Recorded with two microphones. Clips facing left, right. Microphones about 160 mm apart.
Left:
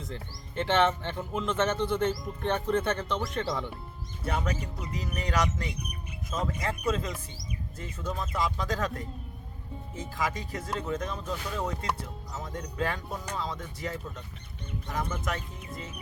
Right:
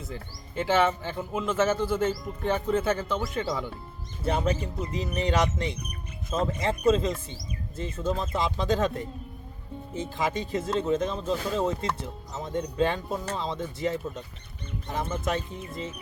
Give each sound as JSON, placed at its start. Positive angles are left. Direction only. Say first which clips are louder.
{"t": 0.0, "sound": "speech", "louder": "right 1 dB", "side_deg": -5}
{"t": 4.2, "sound": "speech", "louder": "right 5 dB", "side_deg": -25}